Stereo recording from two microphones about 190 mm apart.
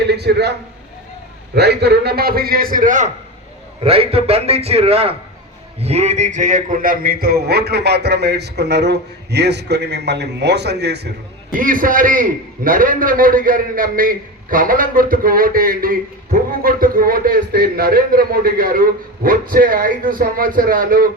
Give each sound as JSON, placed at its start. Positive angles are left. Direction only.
{"t": 0.0, "sound": "a sound", "side_deg": -60}
{"t": 1.5, "sound": "a man's voice", "side_deg": -60}
{"t": 3.8, "sound": "a man's voice", "side_deg": -30}
{"t": 11.5, "sound": "a man's voice", "side_deg": -45}